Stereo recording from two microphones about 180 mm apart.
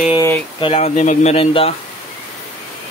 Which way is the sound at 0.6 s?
35° left (ahead or behind).